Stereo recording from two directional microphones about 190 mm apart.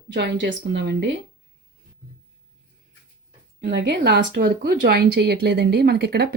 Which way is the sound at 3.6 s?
60° right (ahead or behind).